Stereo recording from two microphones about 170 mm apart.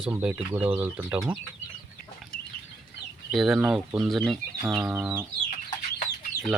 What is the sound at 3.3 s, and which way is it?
Speech, centre (ahead or behind).